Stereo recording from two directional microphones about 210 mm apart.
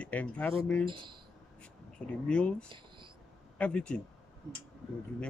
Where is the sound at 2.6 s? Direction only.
25° right (ahead or behind).